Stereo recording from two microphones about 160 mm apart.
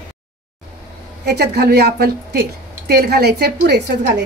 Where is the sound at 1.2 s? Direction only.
90° right.